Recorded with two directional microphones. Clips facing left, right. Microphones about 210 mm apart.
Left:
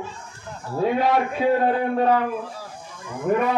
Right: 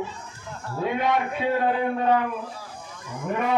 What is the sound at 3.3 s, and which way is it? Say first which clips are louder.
Speech: left 7 dB; 40° left (ahead or behind).